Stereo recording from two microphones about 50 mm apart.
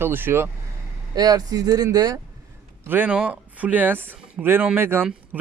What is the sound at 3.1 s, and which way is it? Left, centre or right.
Speech, right.